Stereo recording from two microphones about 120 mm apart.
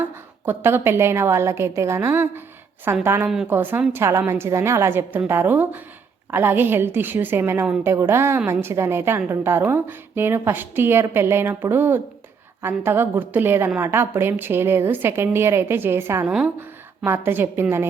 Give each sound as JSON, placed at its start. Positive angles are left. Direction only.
{"t": 0.0, "sound": "a woman's voice", "side_deg": -20}
{"t": 16.2, "sound": "a woman's voice", "side_deg": -5}
{"t": 16.6, "sound": "speech", "side_deg": -15}